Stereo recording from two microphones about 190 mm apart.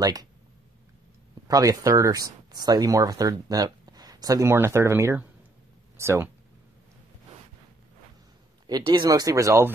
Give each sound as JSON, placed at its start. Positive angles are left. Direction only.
{"t": 0.0, "sound": "speech", "side_deg": -20}
{"t": 1.5, "sound": "speech", "side_deg": -15}
{"t": 8.6, "sound": "speech", "side_deg": -20}